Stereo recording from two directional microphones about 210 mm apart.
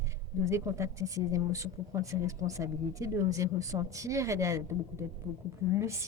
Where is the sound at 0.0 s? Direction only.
15° right (ahead or behind).